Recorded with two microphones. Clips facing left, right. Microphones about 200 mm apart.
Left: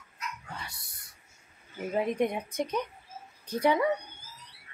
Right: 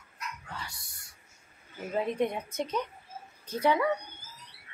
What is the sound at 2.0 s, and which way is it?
A woman's voice, 15° left (ahead or behind).